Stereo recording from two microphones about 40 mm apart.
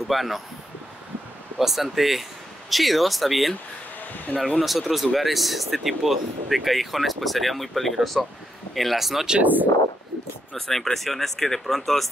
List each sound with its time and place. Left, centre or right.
0.1 s speech: centre
1.6 s speech: centre
4.3 s speech: left
4.6 s speech: centre
9.4 s speech: right
10.5 s speech: centre